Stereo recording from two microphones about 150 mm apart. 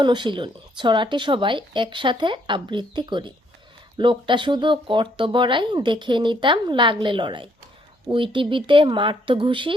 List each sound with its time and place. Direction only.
0.0 s speech: 30° right (ahead or behind)